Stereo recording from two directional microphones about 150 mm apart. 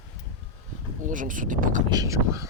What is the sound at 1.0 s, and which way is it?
Speech, 60° right (ahead or behind).